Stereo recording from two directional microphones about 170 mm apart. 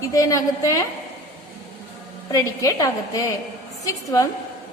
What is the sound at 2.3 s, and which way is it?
A woman's voice, 20° left (ahead or behind).